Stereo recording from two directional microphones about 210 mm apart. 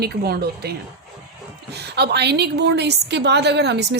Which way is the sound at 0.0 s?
50° right (ahead or behind).